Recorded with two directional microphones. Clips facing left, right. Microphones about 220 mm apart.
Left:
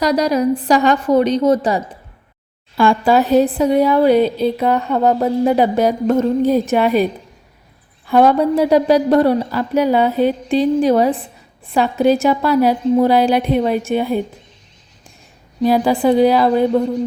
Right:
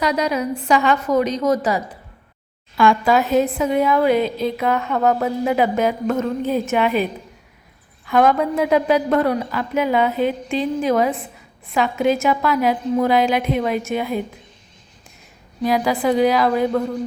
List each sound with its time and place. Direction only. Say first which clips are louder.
0.0 s a woman's voice: left 5 dB; 40° left (ahead or behind)
15.6 s a woman's voice: left 5 dB; 30° left (ahead or behind)